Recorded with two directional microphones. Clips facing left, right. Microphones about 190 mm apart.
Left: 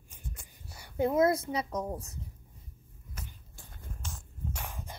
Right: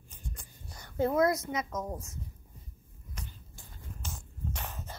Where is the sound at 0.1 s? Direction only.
5° left (ahead or behind); by 1.9 s 35° left (ahead or behind).